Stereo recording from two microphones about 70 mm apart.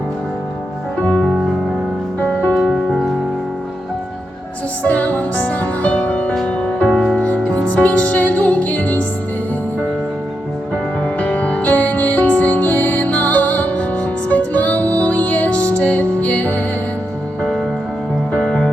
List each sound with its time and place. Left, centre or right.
0.9 s music: centre
2.6 s music: centre
4.8 s music: centre
11.0 s music: centre
17.4 s music: centre